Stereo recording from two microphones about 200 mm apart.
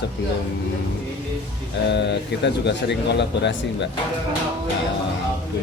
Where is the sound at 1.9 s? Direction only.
60° left (ahead or behind).